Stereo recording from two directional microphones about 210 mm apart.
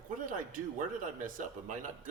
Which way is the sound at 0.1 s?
40° right (ahead or behind).